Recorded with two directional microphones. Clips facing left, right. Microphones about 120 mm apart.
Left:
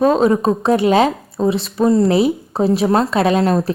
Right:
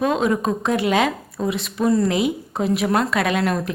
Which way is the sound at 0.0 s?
35° left (ahead or behind).